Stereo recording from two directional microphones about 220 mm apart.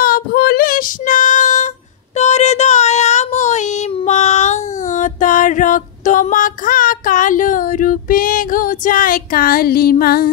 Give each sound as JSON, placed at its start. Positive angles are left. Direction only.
{"t": 0.0, "sound": "child singing", "side_deg": 40}
{"t": 4.8, "sound": "music", "side_deg": 35}